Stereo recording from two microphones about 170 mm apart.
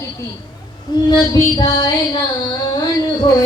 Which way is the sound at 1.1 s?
25° left (ahead or behind).